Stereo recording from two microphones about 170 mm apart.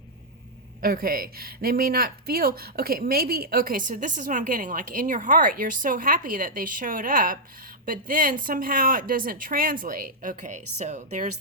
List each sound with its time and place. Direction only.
0.8 s speech: 60° right (ahead or behind); by 11.3 s 45° right (ahead or behind)